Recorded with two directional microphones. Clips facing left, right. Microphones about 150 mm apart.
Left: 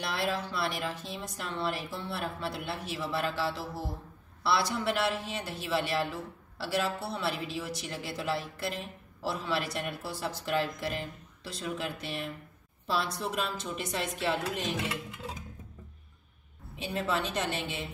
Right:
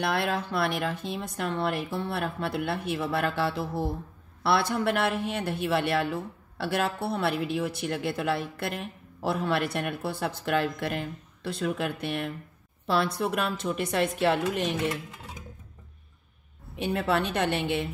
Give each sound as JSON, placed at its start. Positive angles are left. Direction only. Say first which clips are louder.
{"t": 0.0, "sound": "a woman's voice", "louder": "right 5 dB", "side_deg": -60}
{"t": 16.7, "sound": "a woman's voice", "louder": "right 5 dB", "side_deg": -60}